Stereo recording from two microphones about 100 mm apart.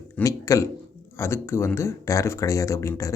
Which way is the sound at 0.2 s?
35° left (ahead or behind).